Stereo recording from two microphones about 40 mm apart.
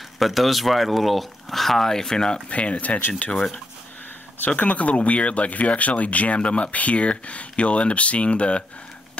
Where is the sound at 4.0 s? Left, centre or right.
Left.